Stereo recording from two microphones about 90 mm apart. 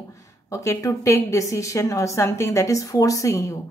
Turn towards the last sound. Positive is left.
turn(degrees=35)  # may be behind; listen again after turning